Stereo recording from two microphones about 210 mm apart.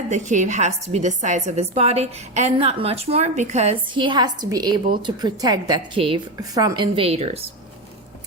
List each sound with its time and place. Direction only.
0.1 s a woman's voice: 35° right (ahead or behind)